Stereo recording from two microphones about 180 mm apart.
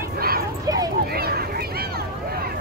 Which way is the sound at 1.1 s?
60° right (ahead or behind).